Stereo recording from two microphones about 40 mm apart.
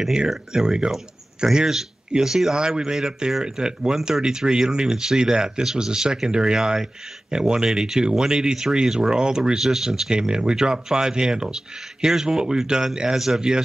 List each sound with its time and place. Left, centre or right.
0.5 s speech: centre